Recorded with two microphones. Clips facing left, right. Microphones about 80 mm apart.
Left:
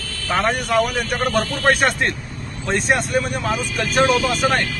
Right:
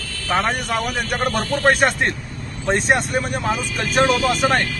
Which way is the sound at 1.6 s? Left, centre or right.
Centre.